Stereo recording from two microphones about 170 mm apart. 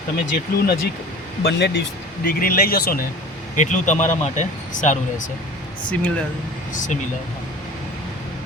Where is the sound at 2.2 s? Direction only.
60° left (ahead or behind).